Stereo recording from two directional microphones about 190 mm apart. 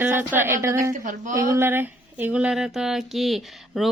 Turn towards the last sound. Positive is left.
turn(degrees=0)  # may be behind; listen again after turning